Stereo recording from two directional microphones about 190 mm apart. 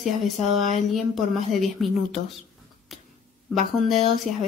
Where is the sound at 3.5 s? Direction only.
Centre (ahead or behind).